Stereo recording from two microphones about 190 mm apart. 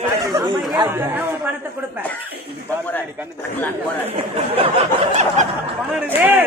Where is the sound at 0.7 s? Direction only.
15° right (ahead or behind).